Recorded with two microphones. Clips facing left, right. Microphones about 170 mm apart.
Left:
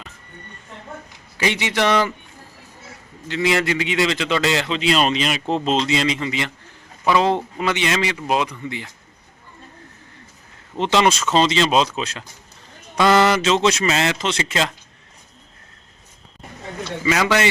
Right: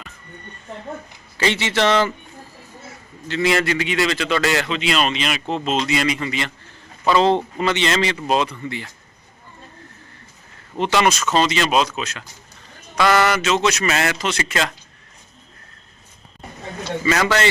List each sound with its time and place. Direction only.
1.4 s a man's voice: 15° left (ahead or behind)
3.2 s a man's voice: 20° left (ahead or behind)
4.8 s a man's voice: 35° left (ahead or behind); by 8.9 s 15° left (ahead or behind)
10.8 s a man's voice: 25° left (ahead or behind)
17.1 s a man's voice: 15° left (ahead or behind)